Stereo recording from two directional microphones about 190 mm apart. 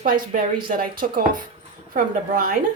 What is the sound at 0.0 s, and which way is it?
A woman's voice, 45° right (ahead or behind).